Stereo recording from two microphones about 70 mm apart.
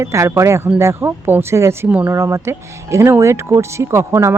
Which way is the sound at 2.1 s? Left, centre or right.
Right.